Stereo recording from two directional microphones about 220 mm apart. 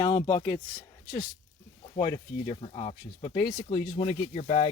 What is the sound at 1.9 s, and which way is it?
Speech, 20° left (ahead or behind).